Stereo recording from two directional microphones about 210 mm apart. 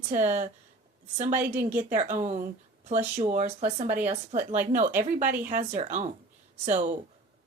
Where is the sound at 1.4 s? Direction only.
10° right (ahead or behind).